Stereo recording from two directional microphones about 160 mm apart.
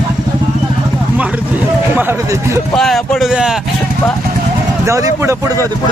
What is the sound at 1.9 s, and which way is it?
Speech, 15° right (ahead or behind).